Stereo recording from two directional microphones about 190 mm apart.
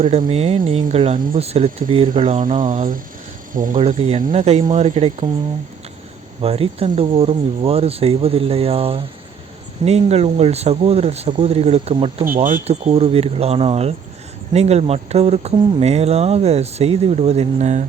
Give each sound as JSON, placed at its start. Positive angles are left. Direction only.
{"t": 0.3, "sound": "speech", "side_deg": -30}
{"t": 2.4, "sound": "speech", "side_deg": -45}
{"t": 3.7, "sound": "speech", "side_deg": -35}
{"t": 6.4, "sound": "speech", "side_deg": -30}
{"t": 12.2, "sound": "speech", "side_deg": -45}